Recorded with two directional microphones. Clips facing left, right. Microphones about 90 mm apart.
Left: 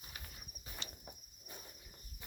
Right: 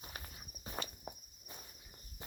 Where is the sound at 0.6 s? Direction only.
45° right (ahead or behind).